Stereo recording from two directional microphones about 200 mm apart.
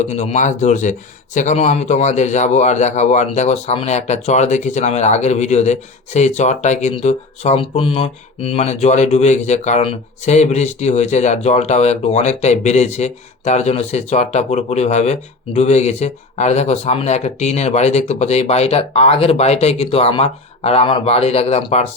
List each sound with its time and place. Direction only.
0.1 s speech: 35° left (ahead or behind)